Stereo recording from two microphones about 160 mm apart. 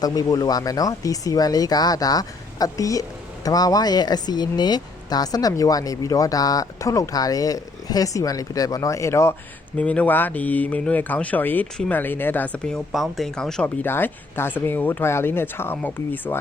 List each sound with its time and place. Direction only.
0.0 s speech: 25° left (ahead or behind)